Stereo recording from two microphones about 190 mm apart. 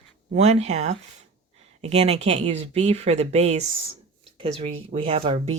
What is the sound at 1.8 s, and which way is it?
A woman's voice, 35° right (ahead or behind).